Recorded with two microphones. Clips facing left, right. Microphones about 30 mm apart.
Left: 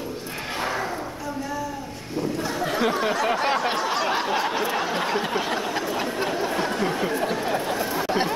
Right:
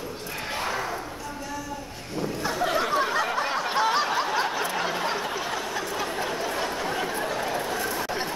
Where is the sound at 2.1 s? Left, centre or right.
Centre.